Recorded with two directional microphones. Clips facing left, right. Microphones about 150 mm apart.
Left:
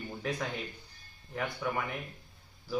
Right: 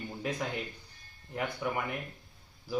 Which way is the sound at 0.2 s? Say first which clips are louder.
Right 1 dB; 15° right (ahead or behind).